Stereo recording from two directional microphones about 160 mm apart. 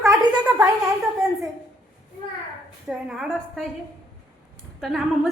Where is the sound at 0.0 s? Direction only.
20° right (ahead or behind).